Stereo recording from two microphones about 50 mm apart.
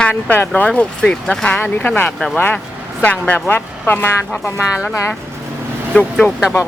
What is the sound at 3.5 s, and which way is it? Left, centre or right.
Speech, left.